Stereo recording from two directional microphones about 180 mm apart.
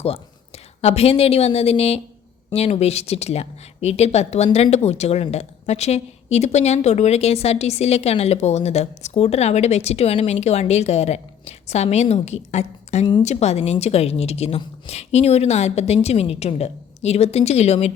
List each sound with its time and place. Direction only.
0.0 s a woman's voice: 35° left (ahead or behind)